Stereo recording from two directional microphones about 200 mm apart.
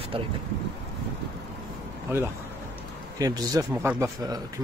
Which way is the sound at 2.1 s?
10° right (ahead or behind).